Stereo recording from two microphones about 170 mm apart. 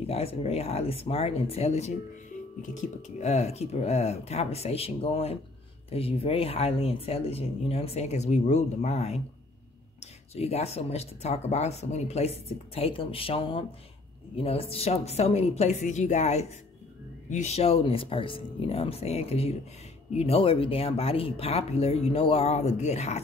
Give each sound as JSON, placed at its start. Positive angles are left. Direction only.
{"t": 0.0, "sound": "speech", "side_deg": 35}
{"t": 10.3, "sound": "speech", "side_deg": 40}